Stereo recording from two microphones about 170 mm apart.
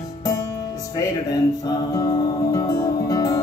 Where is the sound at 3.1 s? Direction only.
20° left (ahead or behind).